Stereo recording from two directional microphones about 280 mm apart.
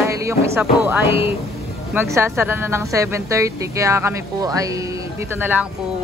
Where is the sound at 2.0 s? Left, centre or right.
Centre.